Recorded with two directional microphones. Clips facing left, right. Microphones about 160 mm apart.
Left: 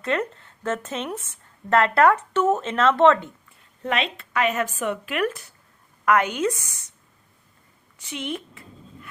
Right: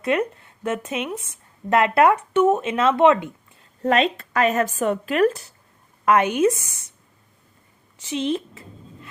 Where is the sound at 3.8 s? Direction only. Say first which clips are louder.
Right 7 dB; 40° right (ahead or behind).